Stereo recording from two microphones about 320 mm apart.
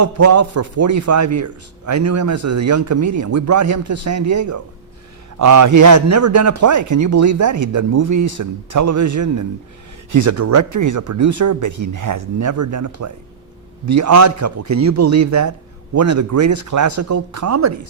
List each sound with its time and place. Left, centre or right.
0.0 s a man's voice: right